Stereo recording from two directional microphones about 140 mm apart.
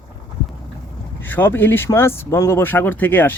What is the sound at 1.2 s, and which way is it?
Speech, 15° left (ahead or behind).